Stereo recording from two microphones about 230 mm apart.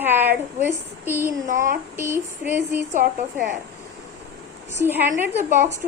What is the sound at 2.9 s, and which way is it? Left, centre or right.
Speech, right.